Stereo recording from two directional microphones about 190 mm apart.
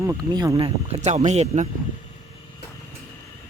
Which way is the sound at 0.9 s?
35° right (ahead or behind).